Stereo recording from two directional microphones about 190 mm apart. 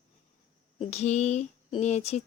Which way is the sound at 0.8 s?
35° left (ahead or behind).